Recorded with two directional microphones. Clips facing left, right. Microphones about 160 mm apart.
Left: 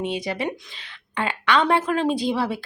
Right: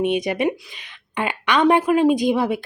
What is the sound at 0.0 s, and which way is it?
Speech, 20° right (ahead or behind).